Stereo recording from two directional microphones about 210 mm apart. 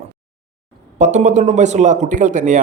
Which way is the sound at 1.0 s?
35° right (ahead or behind).